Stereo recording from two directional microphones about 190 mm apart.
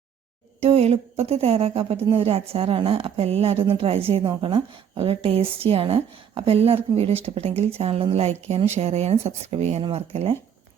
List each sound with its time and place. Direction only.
0.6 s a woman's voice: 30° right (ahead or behind)